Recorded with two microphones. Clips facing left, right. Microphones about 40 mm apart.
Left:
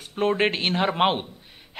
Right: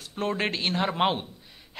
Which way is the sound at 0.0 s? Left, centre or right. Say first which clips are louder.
Left 6 dB; left.